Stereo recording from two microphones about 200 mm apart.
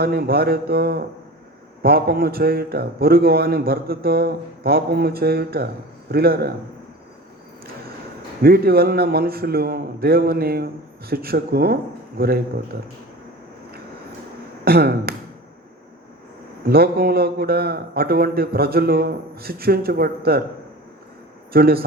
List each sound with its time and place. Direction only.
0.0 s a man's voice: 50° right (ahead or behind)
8.4 s a man's voice: 50° right (ahead or behind)
14.6 s speech: 50° right (ahead or behind)
16.6 s a man's voice: 50° right (ahead or behind)
21.5 s a man's voice: 50° right (ahead or behind)